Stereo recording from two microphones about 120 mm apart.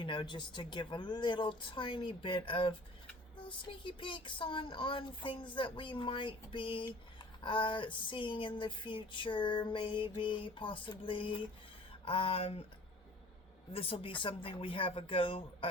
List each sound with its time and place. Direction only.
0.0 s speech: 40° left (ahead or behind)
13.7 s speech: 50° left (ahead or behind)